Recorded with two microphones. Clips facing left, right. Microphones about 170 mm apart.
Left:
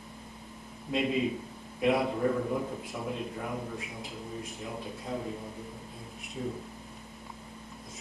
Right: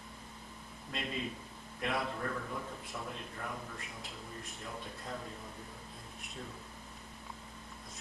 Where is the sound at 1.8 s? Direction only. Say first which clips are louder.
Left 10 dB; 5° left (ahead or behind).